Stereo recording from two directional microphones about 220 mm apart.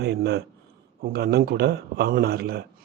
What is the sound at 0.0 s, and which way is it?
A man's voice, 50° right (ahead or behind).